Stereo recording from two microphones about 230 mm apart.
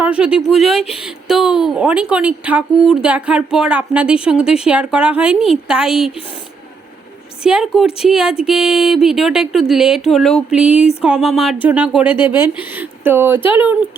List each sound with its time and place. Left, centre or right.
0.0 s speech: centre
7.4 s speech: centre
12.1 s speech: centre
12.7 s speech: centre